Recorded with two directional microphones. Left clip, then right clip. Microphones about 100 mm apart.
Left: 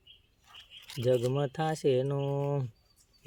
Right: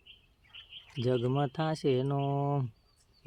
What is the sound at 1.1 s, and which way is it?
Child singing, centre (ahead or behind).